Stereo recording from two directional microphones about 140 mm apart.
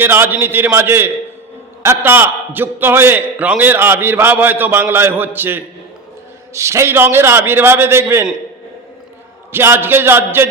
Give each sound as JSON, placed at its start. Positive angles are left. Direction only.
{"t": 0.0, "sound": "a man's voice", "side_deg": -15}
{"t": 9.5, "sound": "a man's voice", "side_deg": -15}